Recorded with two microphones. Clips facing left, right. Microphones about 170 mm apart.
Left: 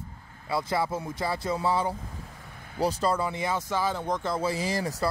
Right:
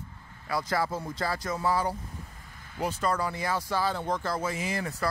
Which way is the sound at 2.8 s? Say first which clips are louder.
Left 3 dB; 35° left (ahead or behind).